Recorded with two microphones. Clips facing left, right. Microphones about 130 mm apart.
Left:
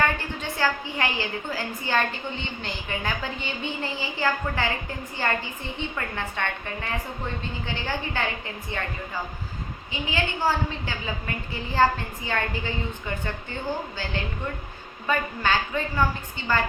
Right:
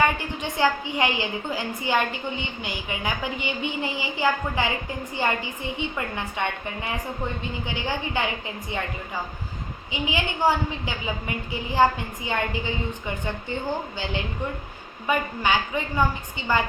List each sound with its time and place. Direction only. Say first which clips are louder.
0.0 s a woman's voice: right 2 dB; 15° right (ahead or behind)
9.9 s a woman's voice: right 1 dB; 15° right (ahead or behind)
15.0 s a woman's voice: right 1 dB; 15° right (ahead or behind)